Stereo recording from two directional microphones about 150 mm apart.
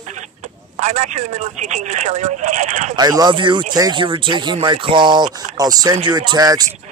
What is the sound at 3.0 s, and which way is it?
Speech, 25° right (ahead or behind).